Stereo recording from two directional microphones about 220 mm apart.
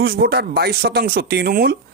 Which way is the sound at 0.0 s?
45° right (ahead or behind).